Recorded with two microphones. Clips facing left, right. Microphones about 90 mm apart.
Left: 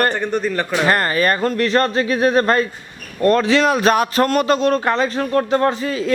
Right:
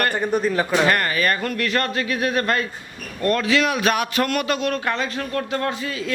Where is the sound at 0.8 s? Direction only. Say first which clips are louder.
Left 3 dB; 35° left (ahead or behind).